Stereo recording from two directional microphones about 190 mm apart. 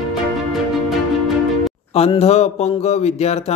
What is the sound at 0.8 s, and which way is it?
Music, centre (ahead or behind).